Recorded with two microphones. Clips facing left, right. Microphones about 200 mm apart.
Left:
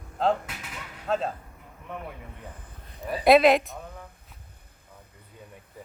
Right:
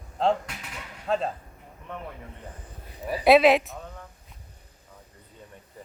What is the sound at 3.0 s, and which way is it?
Speech, centre (ahead or behind).